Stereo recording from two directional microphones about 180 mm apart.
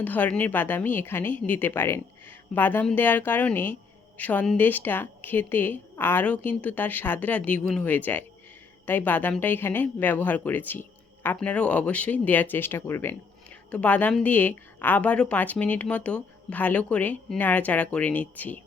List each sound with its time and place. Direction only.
0.0 s speech: 10° left (ahead or behind)